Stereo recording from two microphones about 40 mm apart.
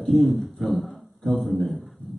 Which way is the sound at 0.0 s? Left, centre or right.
Centre.